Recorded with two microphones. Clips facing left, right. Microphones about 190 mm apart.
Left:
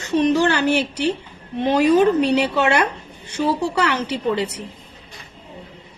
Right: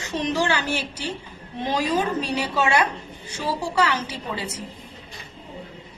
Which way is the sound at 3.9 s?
60° left (ahead or behind).